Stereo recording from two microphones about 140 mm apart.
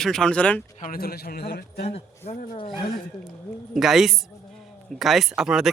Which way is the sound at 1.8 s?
45° left (ahead or behind).